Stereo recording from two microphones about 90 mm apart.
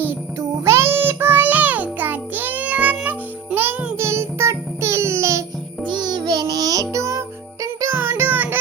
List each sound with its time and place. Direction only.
0.3 s music: 30° right (ahead or behind)
3.9 s music: 30° right (ahead or behind)
5.8 s music: 55° right (ahead or behind); by 8.5 s 20° right (ahead or behind)